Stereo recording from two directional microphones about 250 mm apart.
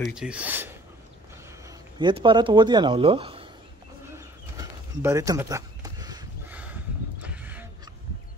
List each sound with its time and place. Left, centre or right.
0.0 s speech: centre
1.7 s speech: centre
4.1 s bird: centre